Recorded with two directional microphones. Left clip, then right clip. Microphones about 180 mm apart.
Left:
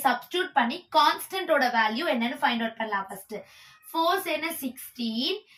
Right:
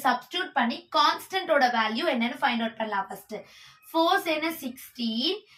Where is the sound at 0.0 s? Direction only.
15° right (ahead or behind).